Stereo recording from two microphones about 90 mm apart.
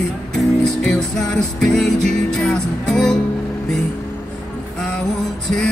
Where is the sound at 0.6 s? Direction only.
5° left (ahead or behind).